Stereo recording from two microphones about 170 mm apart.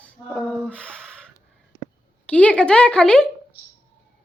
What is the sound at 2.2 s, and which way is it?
Speech, 5° left (ahead or behind).